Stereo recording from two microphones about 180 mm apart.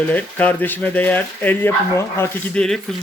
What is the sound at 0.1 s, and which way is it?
Speech, 10° left (ahead or behind).